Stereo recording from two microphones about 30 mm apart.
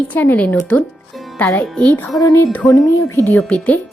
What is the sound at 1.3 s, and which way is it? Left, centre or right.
Speech, left.